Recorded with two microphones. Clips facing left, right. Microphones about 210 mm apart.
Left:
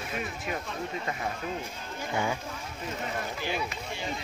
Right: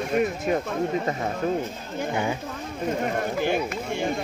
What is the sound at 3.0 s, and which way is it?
Speech, 50° right (ahead or behind).